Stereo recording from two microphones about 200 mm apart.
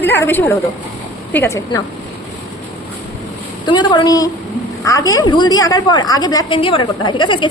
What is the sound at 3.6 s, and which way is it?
A woman's voice, 20° left (ahead or behind).